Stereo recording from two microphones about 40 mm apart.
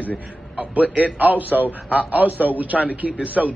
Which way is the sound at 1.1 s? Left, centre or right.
Right.